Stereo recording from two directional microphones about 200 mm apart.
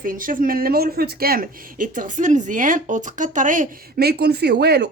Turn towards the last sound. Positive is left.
turn(degrees=-55)  # may be behind; listen again after turning